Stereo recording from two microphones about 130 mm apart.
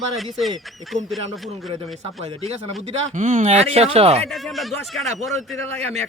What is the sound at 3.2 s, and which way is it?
Speech, 85° right.